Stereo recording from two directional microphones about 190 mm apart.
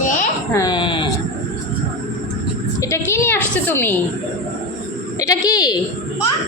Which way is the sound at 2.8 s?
15° left (ahead or behind).